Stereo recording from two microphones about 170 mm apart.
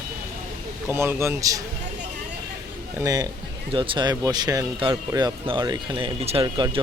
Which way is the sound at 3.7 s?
30° right (ahead or behind).